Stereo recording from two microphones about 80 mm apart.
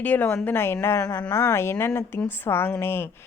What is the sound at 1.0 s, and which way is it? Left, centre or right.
Speech, left.